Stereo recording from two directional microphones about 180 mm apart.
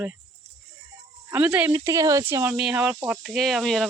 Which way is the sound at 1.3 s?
10° right (ahead or behind).